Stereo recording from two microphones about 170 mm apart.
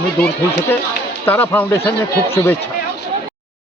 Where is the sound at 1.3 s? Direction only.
10° left (ahead or behind).